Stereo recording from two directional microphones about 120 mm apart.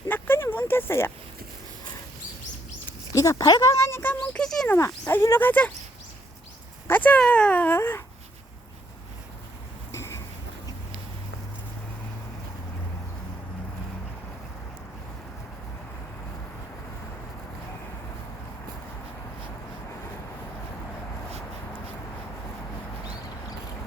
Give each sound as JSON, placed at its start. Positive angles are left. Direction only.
{"t": 0.1, "sound": "a sound", "side_deg": 20}
{"t": 3.1, "sound": "speech", "side_deg": 30}
{"t": 5.0, "sound": "speech", "side_deg": 20}
{"t": 6.8, "sound": "speech", "side_deg": 15}
{"t": 9.9, "sound": "vehicle", "side_deg": 20}